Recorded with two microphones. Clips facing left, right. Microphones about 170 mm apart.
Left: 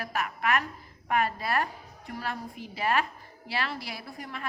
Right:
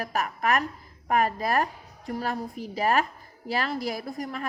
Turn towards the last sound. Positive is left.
turn(degrees=-40)  # may be behind; listen again after turning